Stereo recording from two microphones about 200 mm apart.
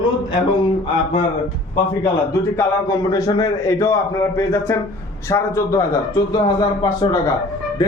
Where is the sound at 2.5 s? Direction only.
15° left (ahead or behind).